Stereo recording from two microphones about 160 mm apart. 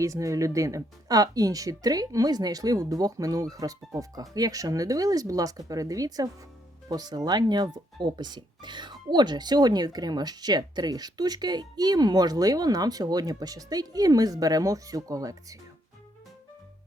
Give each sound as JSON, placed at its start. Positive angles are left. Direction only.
{"t": 0.0, "sound": "speech", "side_deg": -20}